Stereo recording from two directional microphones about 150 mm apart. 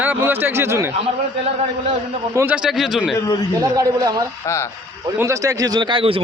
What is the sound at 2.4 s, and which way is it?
Speech, 10° right (ahead or behind).